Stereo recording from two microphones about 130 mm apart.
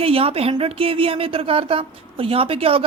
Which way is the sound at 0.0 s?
45° right (ahead or behind).